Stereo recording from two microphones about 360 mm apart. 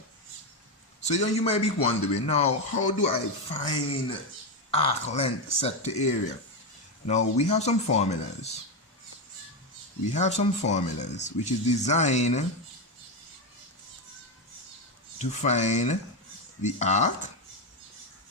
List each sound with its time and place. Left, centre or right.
1.0 s speech: centre
7.1 s speech: centre
10.1 s speech: centre
15.2 s speech: centre